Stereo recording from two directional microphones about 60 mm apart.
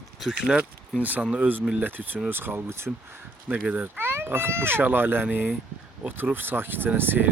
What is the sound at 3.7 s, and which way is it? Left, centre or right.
Speech, right.